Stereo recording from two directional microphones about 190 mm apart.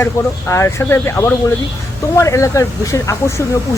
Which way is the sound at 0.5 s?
15° left (ahead or behind).